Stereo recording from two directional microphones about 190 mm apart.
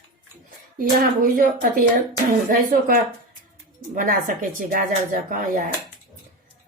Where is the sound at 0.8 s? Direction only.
45° right (ahead or behind).